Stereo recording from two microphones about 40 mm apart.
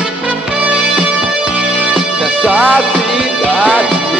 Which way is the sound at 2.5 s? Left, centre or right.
Right.